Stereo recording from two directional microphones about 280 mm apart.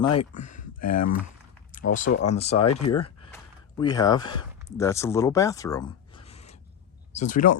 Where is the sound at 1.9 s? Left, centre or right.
Left.